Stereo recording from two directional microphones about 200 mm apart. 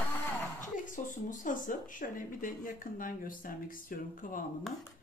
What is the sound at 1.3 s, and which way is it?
Speech, 40° left (ahead or behind).